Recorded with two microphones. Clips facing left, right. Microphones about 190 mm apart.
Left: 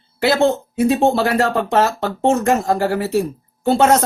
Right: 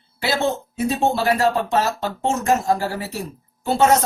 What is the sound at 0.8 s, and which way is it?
Speech, 60° left (ahead or behind).